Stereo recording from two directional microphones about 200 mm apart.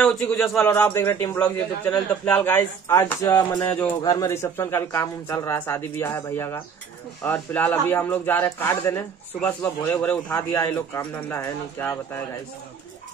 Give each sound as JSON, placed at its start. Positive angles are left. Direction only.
{"t": 0.0, "sound": "a man's voice", "side_deg": 5}